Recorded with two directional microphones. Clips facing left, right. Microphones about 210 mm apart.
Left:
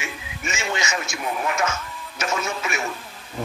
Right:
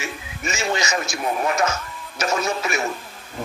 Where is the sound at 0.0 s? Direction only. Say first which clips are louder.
Right 2 dB; 40° right (ahead or behind).